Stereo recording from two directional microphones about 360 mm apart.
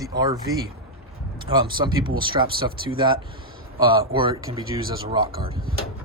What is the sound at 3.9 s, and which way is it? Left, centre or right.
Speech, centre.